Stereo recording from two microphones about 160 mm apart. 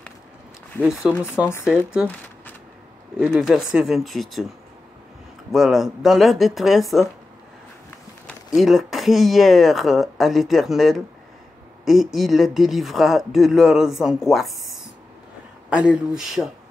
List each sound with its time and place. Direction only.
0.8 s speech: centre (ahead or behind)
3.2 s speech: 5° right (ahead or behind)
5.5 s speech: centre (ahead or behind)
8.5 s speech: centre (ahead or behind)